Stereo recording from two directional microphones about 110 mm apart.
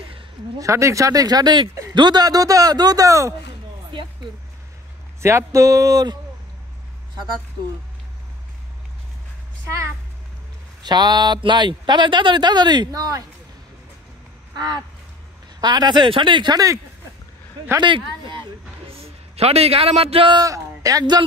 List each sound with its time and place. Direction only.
0.6 s speech: 25° right (ahead or behind)
5.2 s speech: 25° right (ahead or behind)
10.8 s speech: 40° right (ahead or behind)
14.5 s a sound: 40° right (ahead or behind)
15.6 s speech: 40° right (ahead or behind)
17.7 s speech: 45° right (ahead or behind)
18.9 s a man's voice: 65° right (ahead or behind)
20.3 s a man's voice: 30° right (ahead or behind)